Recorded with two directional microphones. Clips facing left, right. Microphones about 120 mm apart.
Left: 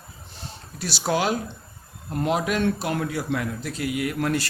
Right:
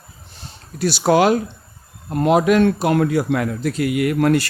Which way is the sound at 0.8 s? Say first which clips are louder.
Right 9 dB; 60° right (ahead or behind).